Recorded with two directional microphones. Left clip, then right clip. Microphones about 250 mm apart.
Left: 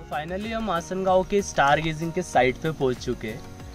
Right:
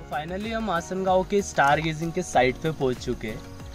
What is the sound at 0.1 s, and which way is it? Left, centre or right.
Speech, centre.